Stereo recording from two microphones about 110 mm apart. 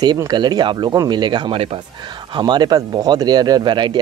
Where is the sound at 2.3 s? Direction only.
40° right (ahead or behind).